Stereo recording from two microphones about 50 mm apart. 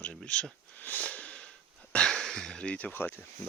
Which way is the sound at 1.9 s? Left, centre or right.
Centre.